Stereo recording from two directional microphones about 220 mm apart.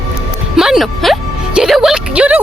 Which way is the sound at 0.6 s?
Centre (ahead or behind).